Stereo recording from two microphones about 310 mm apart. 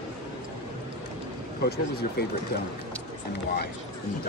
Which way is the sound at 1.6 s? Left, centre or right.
Left.